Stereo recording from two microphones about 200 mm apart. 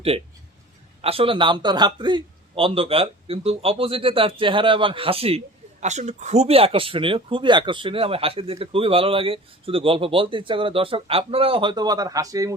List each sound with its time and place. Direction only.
1.0 s speech: 30° right (ahead or behind)